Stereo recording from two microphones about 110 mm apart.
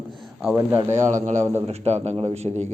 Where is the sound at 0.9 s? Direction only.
90° right.